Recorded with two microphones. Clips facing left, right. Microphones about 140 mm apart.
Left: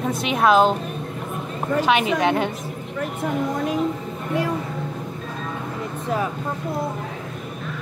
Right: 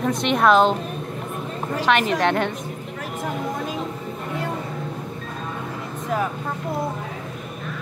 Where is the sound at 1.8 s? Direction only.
5° left (ahead or behind).